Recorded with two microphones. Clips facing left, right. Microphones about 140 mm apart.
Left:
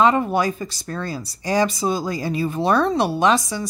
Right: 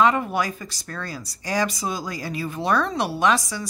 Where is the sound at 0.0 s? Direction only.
25° left (ahead or behind).